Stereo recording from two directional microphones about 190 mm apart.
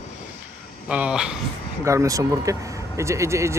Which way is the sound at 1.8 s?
15° right (ahead or behind).